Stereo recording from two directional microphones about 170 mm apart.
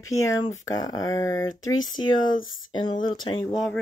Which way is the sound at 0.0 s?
20° left (ahead or behind).